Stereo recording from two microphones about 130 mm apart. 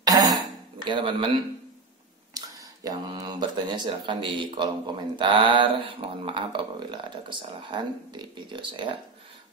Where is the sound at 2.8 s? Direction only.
30° right (ahead or behind).